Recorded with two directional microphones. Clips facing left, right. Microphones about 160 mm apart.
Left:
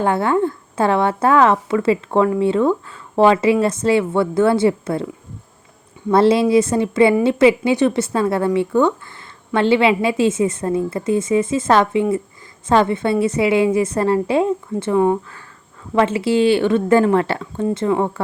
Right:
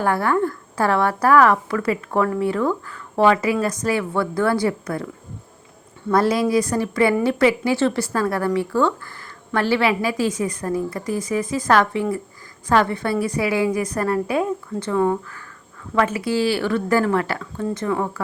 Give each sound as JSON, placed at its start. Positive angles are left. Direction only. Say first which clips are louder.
{"t": 0.0, "sound": "a woman's voice", "louder": "left 3 dB", "side_deg": 20}
{"t": 6.1, "sound": "a woman's voice", "louder": "left 5 dB", "side_deg": 25}